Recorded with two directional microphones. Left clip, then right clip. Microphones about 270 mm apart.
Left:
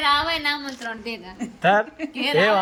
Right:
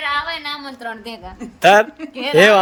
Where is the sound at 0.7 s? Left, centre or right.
Right.